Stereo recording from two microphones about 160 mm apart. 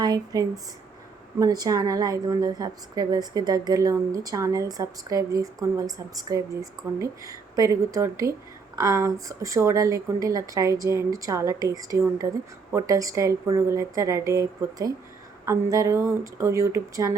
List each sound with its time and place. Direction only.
0.0 s a woman's voice: 25° right (ahead or behind)